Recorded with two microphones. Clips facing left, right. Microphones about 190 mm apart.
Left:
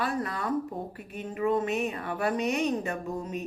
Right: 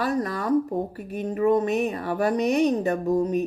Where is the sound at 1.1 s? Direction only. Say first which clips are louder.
Right 6 dB; 40° right (ahead or behind).